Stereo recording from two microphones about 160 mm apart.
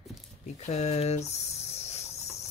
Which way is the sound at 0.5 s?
45° left (ahead or behind).